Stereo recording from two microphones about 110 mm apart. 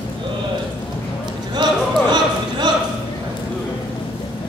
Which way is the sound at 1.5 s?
45° right (ahead or behind).